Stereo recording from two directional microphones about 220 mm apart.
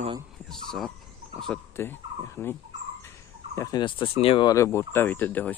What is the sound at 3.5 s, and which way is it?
Speech, 15° left (ahead or behind).